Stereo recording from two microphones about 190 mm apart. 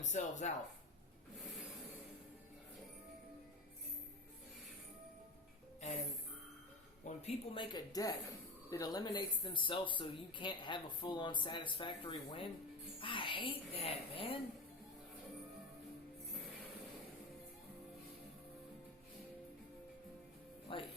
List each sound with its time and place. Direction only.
0.0 s speech: 40° left (ahead or behind)
7.0 s speech: 35° left (ahead or behind)
20.7 s speech: 25° left (ahead or behind)